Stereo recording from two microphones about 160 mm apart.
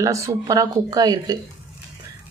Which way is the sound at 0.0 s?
20° right (ahead or behind).